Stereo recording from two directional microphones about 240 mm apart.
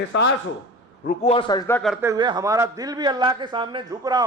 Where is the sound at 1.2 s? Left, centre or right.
Left.